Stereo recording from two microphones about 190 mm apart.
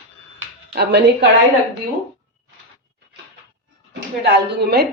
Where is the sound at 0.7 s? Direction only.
60° right (ahead or behind).